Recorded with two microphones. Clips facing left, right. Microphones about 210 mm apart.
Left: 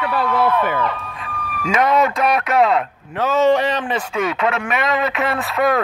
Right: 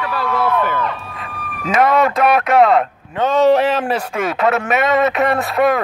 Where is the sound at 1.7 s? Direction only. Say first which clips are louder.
Right 2 dB; 50° right (ahead or behind).